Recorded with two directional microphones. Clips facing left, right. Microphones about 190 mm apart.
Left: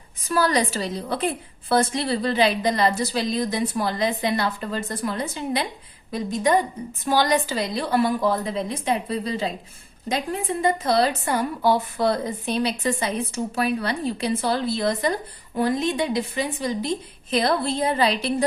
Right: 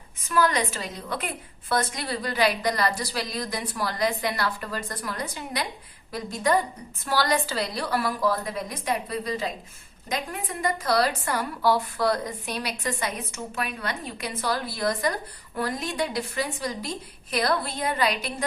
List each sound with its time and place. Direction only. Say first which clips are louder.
0.3 s a woman's voice: left 3 dB; 35° left (ahead or behind)